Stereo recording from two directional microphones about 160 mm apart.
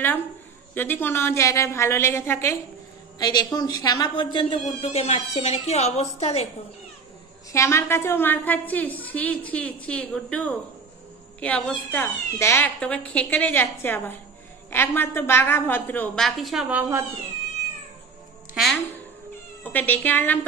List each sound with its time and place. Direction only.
0.7 s a woman's voice: 15° left (ahead or behind); by 4.6 s 30° left (ahead or behind)
4.8 s speech: 45° left (ahead or behind)
7.5 s a woman's voice: 15° left (ahead or behind); by 17.0 s 10° right (ahead or behind)
19.6 s a woman's voice: 10° left (ahead or behind)